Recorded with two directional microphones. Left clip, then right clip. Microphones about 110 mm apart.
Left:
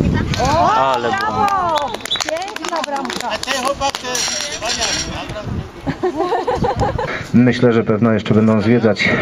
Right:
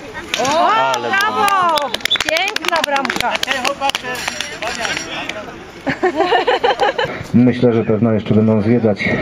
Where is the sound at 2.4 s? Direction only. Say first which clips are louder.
Right 5 dB; 50° right (ahead or behind).